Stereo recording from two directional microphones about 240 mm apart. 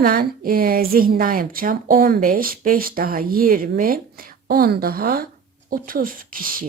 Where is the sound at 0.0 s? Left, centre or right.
Right.